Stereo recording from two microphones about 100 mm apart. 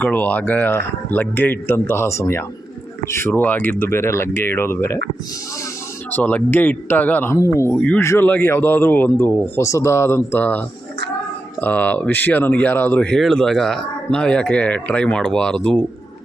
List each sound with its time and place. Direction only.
0.0 s speech: 15° left (ahead or behind)
6.1 s speech: 15° left (ahead or behind)
7.3 s speech: 30° left (ahead or behind)
7.7 s speech: 15° left (ahead or behind)